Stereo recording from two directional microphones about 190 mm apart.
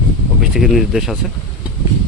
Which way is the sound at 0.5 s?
Centre (ahead or behind).